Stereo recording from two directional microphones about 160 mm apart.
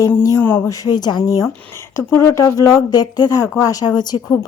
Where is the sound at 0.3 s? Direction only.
15° left (ahead or behind).